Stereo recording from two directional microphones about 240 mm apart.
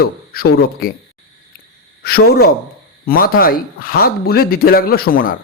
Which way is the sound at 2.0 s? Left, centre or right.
Left.